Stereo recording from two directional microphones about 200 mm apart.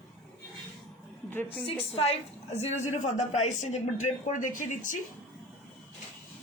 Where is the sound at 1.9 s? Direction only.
30° left (ahead or behind).